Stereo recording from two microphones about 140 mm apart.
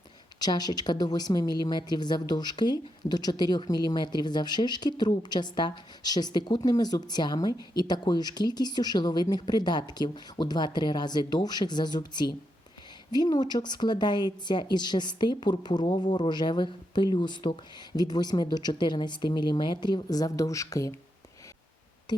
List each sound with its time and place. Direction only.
0.3 s a woman's voice: 30° left (ahead or behind)